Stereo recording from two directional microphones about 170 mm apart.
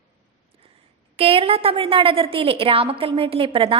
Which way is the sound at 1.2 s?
35° right (ahead or behind).